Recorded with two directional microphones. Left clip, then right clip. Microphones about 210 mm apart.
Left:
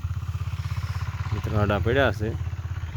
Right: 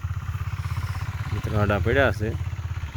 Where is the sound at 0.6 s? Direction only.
35° right (ahead or behind); by 1.5 s 50° right (ahead or behind).